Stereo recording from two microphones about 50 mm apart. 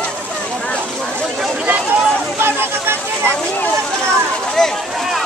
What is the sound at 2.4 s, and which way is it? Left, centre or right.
Chatter, right.